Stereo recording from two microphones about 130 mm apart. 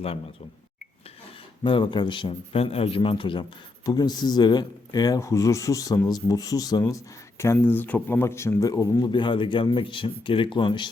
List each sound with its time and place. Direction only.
1.6 s a man's voice: 40° left (ahead or behind)
3.8 s speech: 30° left (ahead or behind)